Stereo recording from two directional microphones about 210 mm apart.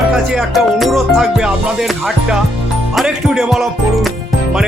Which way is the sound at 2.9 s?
Centre (ahead or behind).